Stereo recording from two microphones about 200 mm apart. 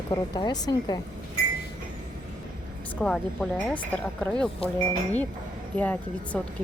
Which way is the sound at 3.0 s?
Centre (ahead or behind).